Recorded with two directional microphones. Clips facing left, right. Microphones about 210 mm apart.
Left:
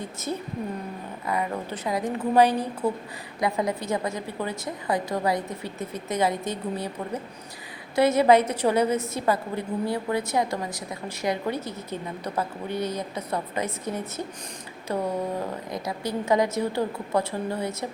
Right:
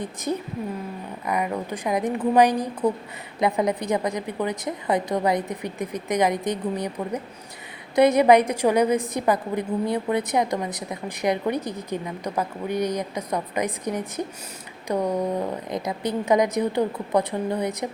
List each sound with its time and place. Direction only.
0.0 s a woman's voice: 15° right (ahead or behind)